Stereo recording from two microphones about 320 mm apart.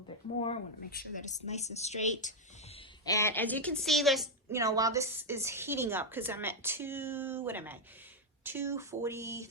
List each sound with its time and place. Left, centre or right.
0.3 s a woman's voice: centre
3.1 s a woman's voice: centre
4.6 s a woman's voice: centre